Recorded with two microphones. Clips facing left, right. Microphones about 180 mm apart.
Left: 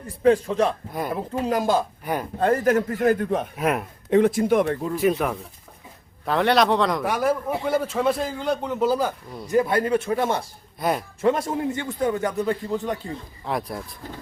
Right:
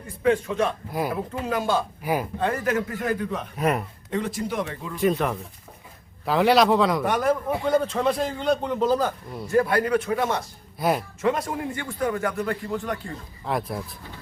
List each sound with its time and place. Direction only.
0.2 s speech: 35° left (ahead or behind)
2.0 s speech: 5° right (ahead or behind)
2.4 s a man's voice: 45° left (ahead or behind)
3.6 s a man's voice: centre (ahead or behind)
4.1 s speech: 55° left (ahead or behind)
4.9 s a man's voice: 5° left (ahead or behind)
9.5 s a man's voice: 20° left (ahead or behind)
10.8 s speech: centre (ahead or behind)
11.2 s a man's voice: 25° left (ahead or behind)
13.4 s a man's voice: centre (ahead or behind)